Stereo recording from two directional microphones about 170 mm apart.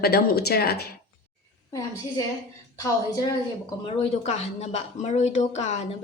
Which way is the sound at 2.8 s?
20° left (ahead or behind).